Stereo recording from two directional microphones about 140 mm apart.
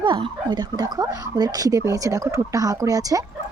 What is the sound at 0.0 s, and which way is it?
Speech, 35° right (ahead or behind).